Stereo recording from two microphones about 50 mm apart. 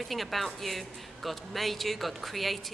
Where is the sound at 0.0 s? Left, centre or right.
Centre.